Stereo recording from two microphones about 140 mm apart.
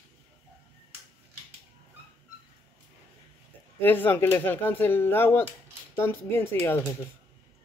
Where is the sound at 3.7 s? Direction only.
15° left (ahead or behind).